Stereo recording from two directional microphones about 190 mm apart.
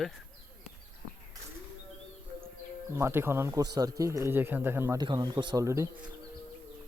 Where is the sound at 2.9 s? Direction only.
15° right (ahead or behind).